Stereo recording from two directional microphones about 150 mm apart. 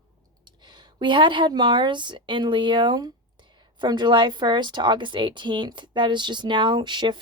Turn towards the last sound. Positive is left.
turn(degrees=-30)  # may be behind; listen again after turning